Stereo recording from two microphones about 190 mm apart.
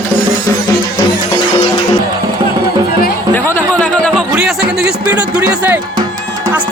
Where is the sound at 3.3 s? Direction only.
10° left (ahead or behind).